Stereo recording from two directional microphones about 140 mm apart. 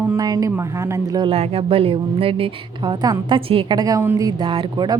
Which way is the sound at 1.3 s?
45° right (ahead or behind).